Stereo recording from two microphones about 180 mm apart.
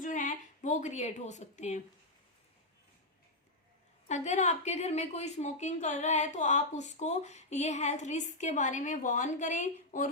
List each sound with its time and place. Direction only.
0.0 s a woman's voice: 45° left (ahead or behind)
4.1 s a woman's voice: 40° left (ahead or behind)